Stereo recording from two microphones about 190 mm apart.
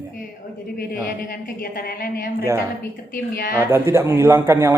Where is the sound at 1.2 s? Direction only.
50° left (ahead or behind).